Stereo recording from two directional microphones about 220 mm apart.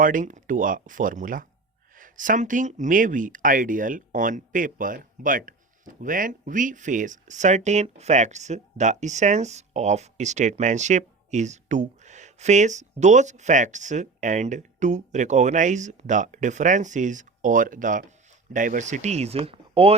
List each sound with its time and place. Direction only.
0.0 s speech: 35° right (ahead or behind)